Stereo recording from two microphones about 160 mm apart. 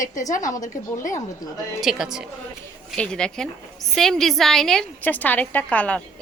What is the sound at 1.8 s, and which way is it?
A woman's voice, centre (ahead or behind).